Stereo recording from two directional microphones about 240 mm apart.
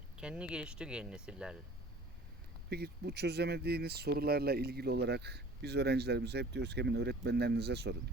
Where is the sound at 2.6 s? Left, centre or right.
Right.